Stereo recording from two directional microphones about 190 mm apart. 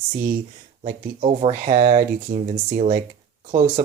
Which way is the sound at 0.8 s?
30° right (ahead or behind).